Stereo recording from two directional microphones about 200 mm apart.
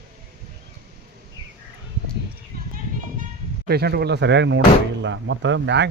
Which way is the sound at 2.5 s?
45° right (ahead or behind).